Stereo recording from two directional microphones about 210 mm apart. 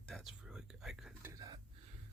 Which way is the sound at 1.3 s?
20° right (ahead or behind).